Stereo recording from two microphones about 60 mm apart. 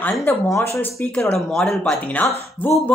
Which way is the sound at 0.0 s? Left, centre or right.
Left.